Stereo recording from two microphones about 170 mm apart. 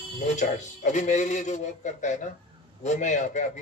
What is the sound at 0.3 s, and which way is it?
Speech, 45° left (ahead or behind).